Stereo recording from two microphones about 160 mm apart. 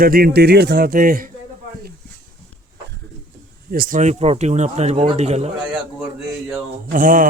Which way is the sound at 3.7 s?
65° right (ahead or behind).